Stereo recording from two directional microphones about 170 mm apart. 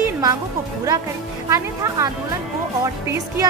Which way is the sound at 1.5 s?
20° right (ahead or behind).